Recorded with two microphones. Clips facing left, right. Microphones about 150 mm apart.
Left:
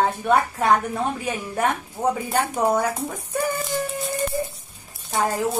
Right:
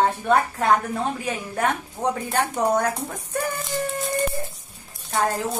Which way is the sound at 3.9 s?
Centre (ahead or behind).